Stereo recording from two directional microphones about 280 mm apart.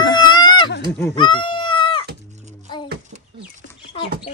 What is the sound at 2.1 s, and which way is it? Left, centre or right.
Cat, right.